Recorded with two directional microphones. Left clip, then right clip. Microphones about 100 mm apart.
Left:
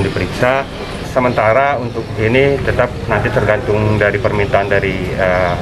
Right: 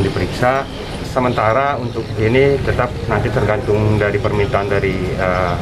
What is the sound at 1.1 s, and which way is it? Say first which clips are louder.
Speech: left 3 dB; 10° right (ahead or behind).